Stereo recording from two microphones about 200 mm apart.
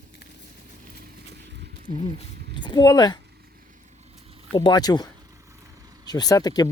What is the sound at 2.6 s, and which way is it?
Speech, 20° left (ahead or behind).